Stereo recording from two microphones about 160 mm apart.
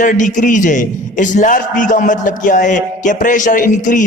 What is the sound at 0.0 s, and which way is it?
A man's voice, 50° left (ahead or behind).